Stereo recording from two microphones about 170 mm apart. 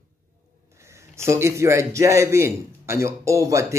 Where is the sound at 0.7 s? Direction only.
15° right (ahead or behind).